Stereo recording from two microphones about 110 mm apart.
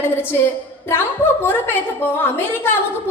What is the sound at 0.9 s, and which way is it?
A woman's voice, 20° left (ahead or behind).